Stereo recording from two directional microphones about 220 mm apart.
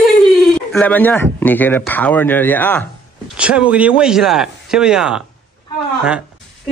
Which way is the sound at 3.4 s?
5° right (ahead or behind).